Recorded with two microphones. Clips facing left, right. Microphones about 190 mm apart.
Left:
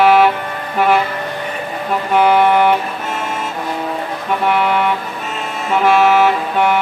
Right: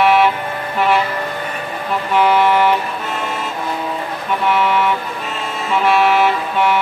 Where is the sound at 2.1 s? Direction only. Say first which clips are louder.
Left 2 dB; 50° left (ahead or behind).